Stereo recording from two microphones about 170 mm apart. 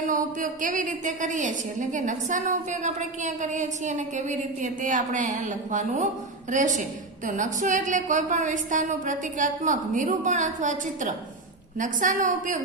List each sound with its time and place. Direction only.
0.0 s a woman's voice: 50° right (ahead or behind)